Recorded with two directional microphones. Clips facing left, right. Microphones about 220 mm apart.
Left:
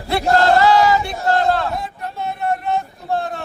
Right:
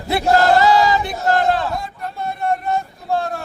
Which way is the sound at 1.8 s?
Centre (ahead or behind).